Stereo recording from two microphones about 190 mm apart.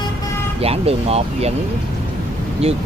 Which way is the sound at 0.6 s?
30° right (ahead or behind).